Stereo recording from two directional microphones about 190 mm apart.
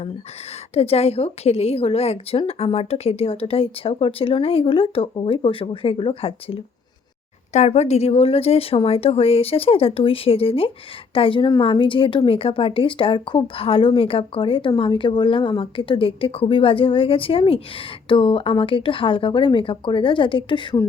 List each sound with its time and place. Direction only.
0.7 s a woman's voice: 30° left (ahead or behind)